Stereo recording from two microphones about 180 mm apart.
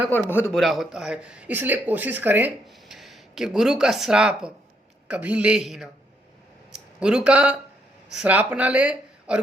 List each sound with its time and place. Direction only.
0.1 s a man's voice: 10° left (ahead or behind)
0.5 s speech: centre (ahead or behind)